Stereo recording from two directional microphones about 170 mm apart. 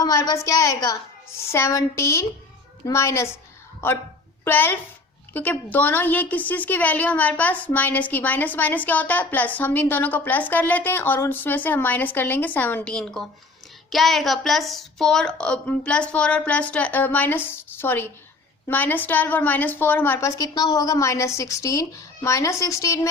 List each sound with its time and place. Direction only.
0.0 s a woman's voice: 20° left (ahead or behind)
4.4 s a woman's voice: 10° left (ahead or behind)